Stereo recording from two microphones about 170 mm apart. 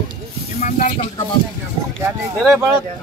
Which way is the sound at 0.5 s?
50° left (ahead or behind).